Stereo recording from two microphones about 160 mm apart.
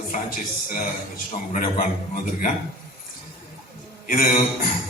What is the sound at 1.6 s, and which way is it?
Speech, 55° left (ahead or behind).